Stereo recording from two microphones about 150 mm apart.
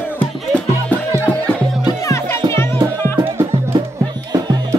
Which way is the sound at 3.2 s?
20° right (ahead or behind).